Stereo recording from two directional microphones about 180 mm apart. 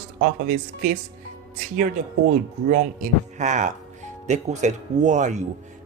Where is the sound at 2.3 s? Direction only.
45° right (ahead or behind).